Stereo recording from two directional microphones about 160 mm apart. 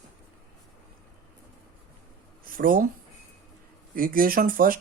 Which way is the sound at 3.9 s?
60° right (ahead or behind).